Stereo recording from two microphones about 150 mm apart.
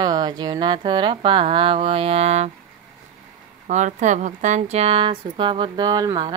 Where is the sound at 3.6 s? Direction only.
55° right (ahead or behind); by 6.3 s 30° right (ahead or behind).